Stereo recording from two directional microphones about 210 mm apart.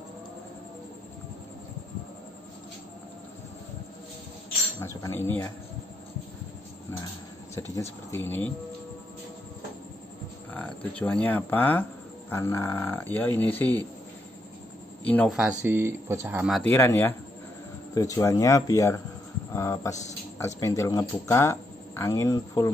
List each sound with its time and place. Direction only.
4.7 s speech: 15° left (ahead or behind)
8.1 s speech: 10° left (ahead or behind)
10.5 s speech: 5° left (ahead or behind)
15.0 s speech: 5° left (ahead or behind)
15.3 s speech: 5° right (ahead or behind)
16.6 s speech: 15° left (ahead or behind)